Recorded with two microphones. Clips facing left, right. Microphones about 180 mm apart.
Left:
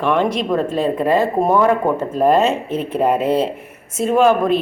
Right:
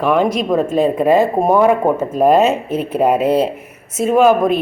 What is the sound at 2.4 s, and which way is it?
Speech, 40° right (ahead or behind).